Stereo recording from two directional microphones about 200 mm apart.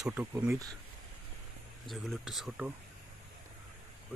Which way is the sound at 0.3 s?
15° right (ahead or behind).